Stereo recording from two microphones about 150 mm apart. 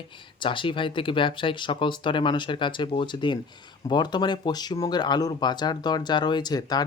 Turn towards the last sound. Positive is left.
turn(degrees=25)  # may be behind; listen again after turning